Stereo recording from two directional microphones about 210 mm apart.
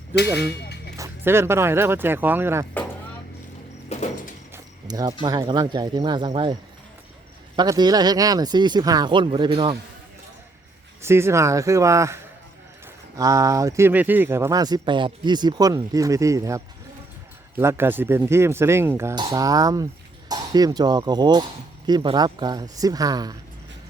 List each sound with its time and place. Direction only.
0.3 s vehicle: 50° left (ahead or behind)
0.9 s speech: 15° right (ahead or behind)
3.8 s sliding door: 30° left (ahead or behind)
4.5 s pulleys: 20° right (ahead or behind)
5.2 s speech: 20° right (ahead or behind)
11.0 s speech: 10° right (ahead or behind)